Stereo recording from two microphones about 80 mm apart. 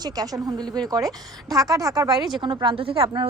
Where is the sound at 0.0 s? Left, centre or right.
Right.